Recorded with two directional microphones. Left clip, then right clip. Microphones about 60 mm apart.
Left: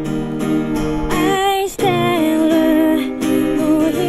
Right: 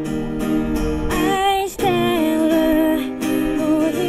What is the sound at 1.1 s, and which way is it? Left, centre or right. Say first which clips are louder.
Music: left 2 dB; left.